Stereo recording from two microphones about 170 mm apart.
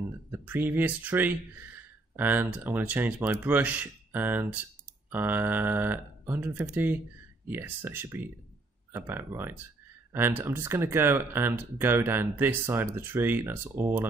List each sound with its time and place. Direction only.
0.3 s speech: 10° right (ahead or behind)